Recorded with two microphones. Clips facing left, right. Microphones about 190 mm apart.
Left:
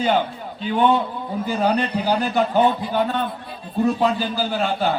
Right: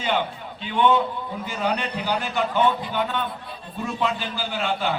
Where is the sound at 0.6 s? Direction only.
40° left (ahead or behind).